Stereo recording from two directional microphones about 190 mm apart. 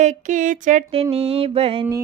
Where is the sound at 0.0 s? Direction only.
40° right (ahead or behind).